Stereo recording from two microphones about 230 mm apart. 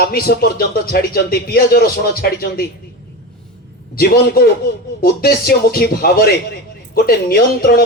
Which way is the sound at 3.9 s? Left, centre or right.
Left.